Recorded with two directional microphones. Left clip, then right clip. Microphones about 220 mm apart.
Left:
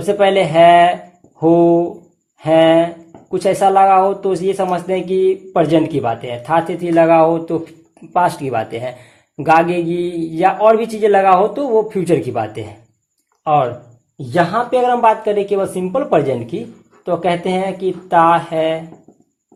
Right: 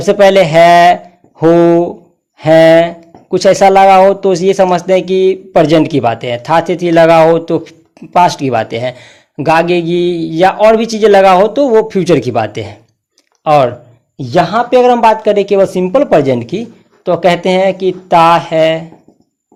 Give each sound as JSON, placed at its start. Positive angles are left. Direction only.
{"t": 0.0, "sound": "speech", "side_deg": -45}